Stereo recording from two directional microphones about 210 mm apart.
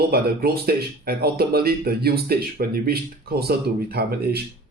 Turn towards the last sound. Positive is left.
turn(degrees=-50)  # may be behind; listen again after turning